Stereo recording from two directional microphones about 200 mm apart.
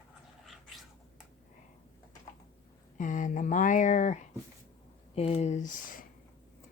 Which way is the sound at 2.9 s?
40° left (ahead or behind).